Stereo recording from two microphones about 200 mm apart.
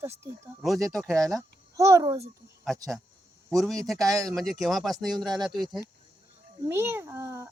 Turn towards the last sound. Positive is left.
turn(degrees=-15)  # may be behind; listen again after turning